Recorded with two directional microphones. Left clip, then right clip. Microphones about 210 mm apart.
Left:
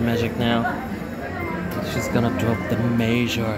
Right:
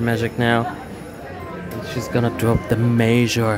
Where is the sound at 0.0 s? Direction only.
40° right (ahead or behind).